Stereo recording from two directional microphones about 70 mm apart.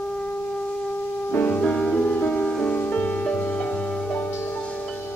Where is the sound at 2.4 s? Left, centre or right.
Centre.